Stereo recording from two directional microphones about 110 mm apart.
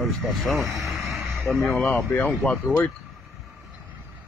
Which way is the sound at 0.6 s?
30° right (ahead or behind).